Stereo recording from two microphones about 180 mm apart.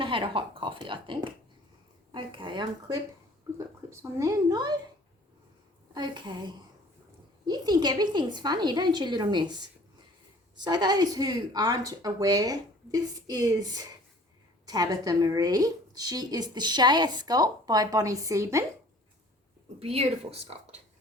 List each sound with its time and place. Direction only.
0.0 s a woman's voice: 30° right (ahead or behind)
5.9 s a woman's voice: 25° right (ahead or behind)
19.8 s speech: 35° right (ahead or behind)